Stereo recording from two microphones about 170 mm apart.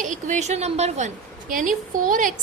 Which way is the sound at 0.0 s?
45° right (ahead or behind).